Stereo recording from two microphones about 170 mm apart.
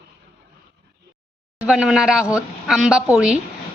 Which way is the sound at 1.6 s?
5° right (ahead or behind).